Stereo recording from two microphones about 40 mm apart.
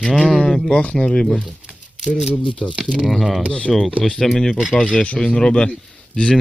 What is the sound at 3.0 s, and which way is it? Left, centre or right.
Speech, centre.